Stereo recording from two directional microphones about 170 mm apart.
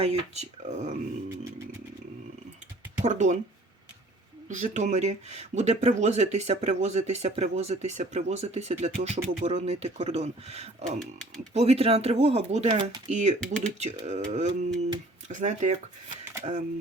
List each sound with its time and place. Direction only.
0.0 s speech: 40° right (ahead or behind)
3.0 s speech: 45° right (ahead or behind)
4.4 s speech: 45° right (ahead or behind)